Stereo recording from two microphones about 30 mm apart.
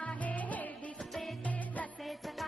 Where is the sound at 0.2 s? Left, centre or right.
Left.